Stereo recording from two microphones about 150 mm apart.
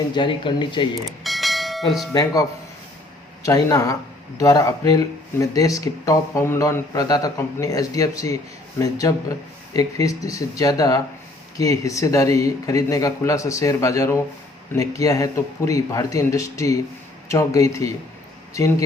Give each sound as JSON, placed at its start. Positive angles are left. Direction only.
{"t": 0.1, "sound": "speech", "side_deg": 30}
{"t": 1.0, "sound": "bell", "side_deg": 0}
{"t": 2.1, "sound": "speech", "side_deg": 25}